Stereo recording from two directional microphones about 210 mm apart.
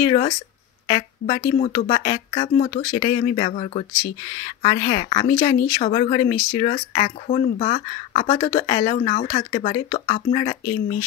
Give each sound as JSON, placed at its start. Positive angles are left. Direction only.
{"t": 0.0, "sound": "a woman's voice", "side_deg": 25}
{"t": 5.4, "sound": "speech", "side_deg": 20}
{"t": 8.9, "sound": "speech", "side_deg": 35}
{"t": 9.5, "sound": "speech", "side_deg": 25}